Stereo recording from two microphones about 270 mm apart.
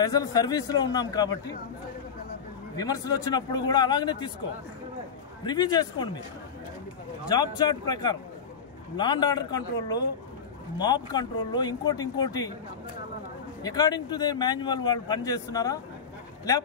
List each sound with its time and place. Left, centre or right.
0.0 s speech: centre
2.7 s speech: centre
5.4 s speech: centre
7.2 s speech: centre
13.6 s speech: centre